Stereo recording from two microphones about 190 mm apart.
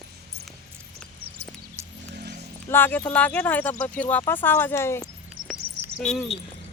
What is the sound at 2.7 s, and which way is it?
Speech, 10° left (ahead or behind).